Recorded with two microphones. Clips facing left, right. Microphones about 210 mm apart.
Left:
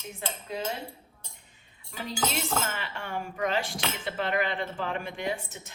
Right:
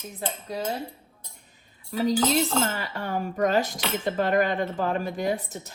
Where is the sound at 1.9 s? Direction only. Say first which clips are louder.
Right 10 dB; 35° right (ahead or behind).